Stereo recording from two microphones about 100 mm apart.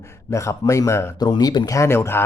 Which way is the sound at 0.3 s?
30° left (ahead or behind).